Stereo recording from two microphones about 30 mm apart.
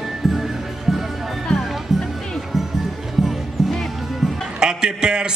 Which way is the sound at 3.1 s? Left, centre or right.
Centre.